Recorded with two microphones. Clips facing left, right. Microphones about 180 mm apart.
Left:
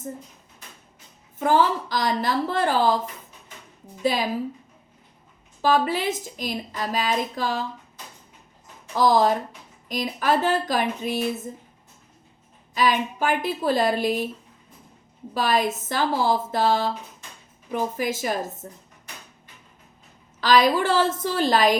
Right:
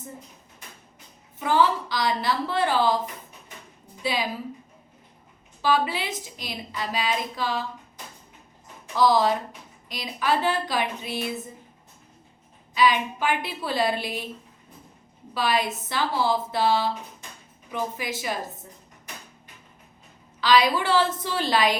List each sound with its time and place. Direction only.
1.4 s a woman's voice: 45° left (ahead or behind)
4.0 s a woman's voice: 45° left (ahead or behind)
5.6 s a woman's voice: 45° left (ahead or behind)
9.0 s a woman's voice: 45° left (ahead or behind)
12.7 s a woman's voice: 45° left (ahead or behind)
15.4 s a woman's voice: 45° left (ahead or behind)
20.4 s a woman's voice: 45° left (ahead or behind)